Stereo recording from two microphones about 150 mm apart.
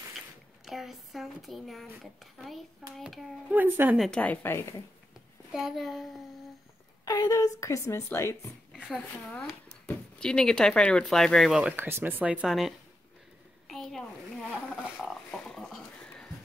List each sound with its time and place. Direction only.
0.7 s speech: centre (ahead or behind)
3.5 s a woman's voice: 15° right (ahead or behind)
3.9 s speech: centre (ahead or behind)
4.2 s a woman's voice: 10° left (ahead or behind)
5.5 s speech: 5° right (ahead or behind)
7.1 s a woman's voice: 25° left (ahead or behind)
8.7 s speech: 5° right (ahead or behind)
13.7 s a sound: centre (ahead or behind)